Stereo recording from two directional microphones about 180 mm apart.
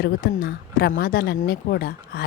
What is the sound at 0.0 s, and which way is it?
A woman's voice, 65° left (ahead or behind).